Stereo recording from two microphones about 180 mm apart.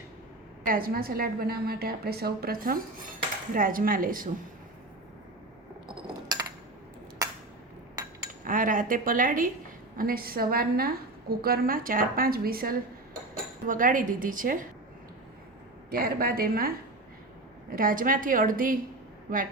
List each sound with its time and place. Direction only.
0.6 s a woman's voice: 55° right (ahead or behind)
5.9 s coin: 20° right (ahead or behind)
8.4 s a woman's voice: 50° right (ahead or behind)
15.9 s a woman's voice: 55° right (ahead or behind)